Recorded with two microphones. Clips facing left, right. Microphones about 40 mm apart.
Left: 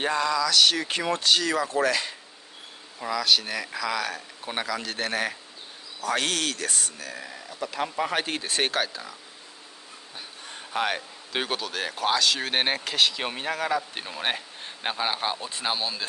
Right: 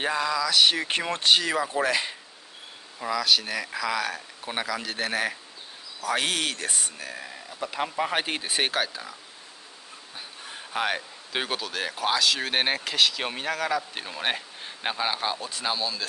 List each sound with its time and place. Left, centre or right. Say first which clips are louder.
0.0 s speech: left 1 dB; centre
0.8 s speech: right 1 dB; right
3.0 s a man's voice: even; centre
7.2 s speech: left 1 dB; centre
10.1 s speech: right 1 dB; centre
15.4 s speech: even; centre